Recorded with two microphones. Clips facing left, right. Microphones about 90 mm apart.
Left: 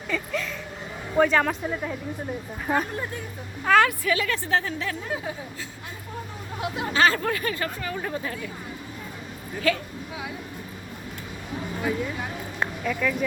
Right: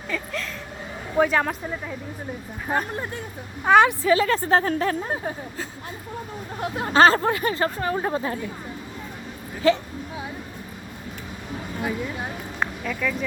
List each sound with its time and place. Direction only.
0.1 s speech: centre (ahead or behind)
3.6 s a woman's voice: 20° right (ahead or behind)
4.1 s speech: 35° right (ahead or behind)
9.6 s a woman's voice: 25° right (ahead or behind)
12.8 s speech: centre (ahead or behind)